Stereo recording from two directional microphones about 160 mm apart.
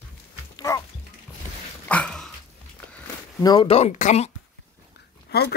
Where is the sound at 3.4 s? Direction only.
25° left (ahead or behind).